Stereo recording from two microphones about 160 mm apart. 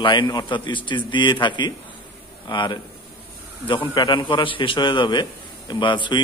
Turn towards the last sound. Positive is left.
turn(degrees=30)  # may be behind; listen again after turning